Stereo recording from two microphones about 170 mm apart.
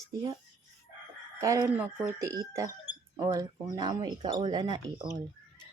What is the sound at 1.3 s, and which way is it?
Speech, 20° right (ahead or behind).